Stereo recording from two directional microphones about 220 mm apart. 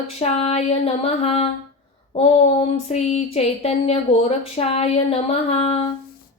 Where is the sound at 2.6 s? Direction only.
30° left (ahead or behind).